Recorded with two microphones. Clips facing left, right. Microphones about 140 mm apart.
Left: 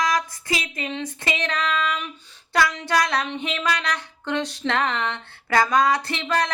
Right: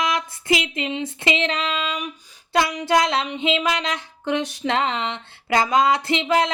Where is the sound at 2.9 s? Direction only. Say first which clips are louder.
Right 3 dB; 20° right (ahead or behind).